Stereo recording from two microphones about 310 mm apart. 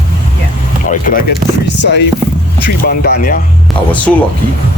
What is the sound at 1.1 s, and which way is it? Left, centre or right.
Speech, left.